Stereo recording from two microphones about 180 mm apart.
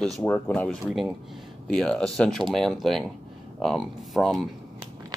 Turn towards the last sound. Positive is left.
turn(degrees=0)  # may be behind; listen again after turning